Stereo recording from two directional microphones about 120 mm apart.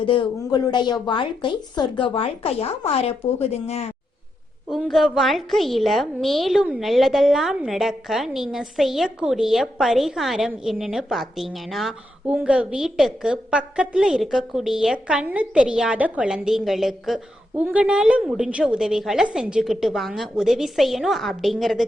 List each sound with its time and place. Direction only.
0.0 s speech: 45° left (ahead or behind); by 3.9 s 60° left (ahead or behind)
4.9 s a woman's voice: centre (ahead or behind)